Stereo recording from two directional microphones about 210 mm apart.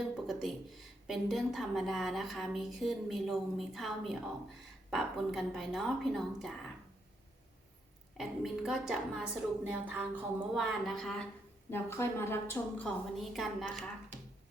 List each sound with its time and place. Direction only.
0.3 s a woman's voice: centre (ahead or behind)
8.2 s a woman's voice: centre (ahead or behind)